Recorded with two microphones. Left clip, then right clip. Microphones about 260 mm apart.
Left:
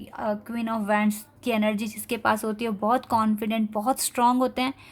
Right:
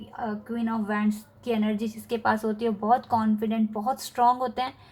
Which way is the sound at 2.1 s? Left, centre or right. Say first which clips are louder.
Left 1 dB; left.